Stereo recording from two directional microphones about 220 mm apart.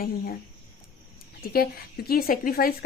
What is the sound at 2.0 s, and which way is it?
Speech, 40° left (ahead or behind).